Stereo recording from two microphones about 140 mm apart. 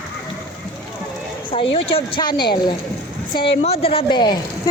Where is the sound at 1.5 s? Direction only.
40° left (ahead or behind).